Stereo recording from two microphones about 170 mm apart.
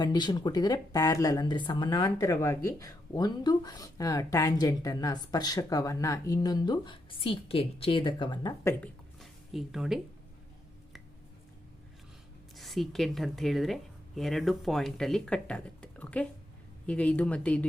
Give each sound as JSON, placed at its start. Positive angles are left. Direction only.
{"t": 0.0, "sound": "speech", "side_deg": 25}
{"t": 8.8, "sound": "a sound", "side_deg": 0}
{"t": 12.5, "sound": "speech", "side_deg": 0}